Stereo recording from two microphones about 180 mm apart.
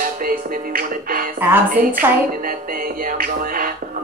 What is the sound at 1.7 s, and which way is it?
Speech, 50° right (ahead or behind).